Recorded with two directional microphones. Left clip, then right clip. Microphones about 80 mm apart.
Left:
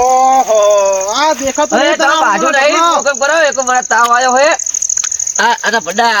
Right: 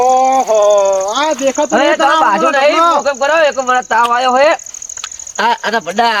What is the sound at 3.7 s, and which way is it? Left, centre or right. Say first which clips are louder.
Speech: left 2 dB; left.